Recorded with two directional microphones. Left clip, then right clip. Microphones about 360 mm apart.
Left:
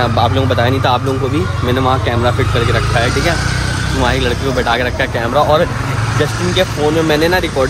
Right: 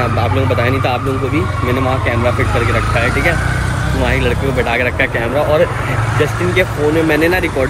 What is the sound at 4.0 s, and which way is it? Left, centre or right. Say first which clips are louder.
Speech: left 1 dB; centre.